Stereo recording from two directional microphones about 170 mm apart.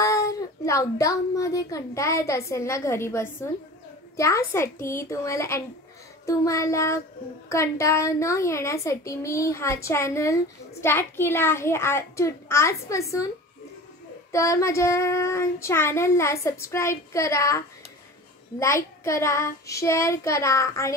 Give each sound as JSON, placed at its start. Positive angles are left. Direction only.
{"t": 0.0, "sound": "a woman's voice", "side_deg": 20}
{"t": 4.5, "sound": "a woman's voice", "side_deg": 15}
{"t": 14.3, "sound": "a woman's voice", "side_deg": 20}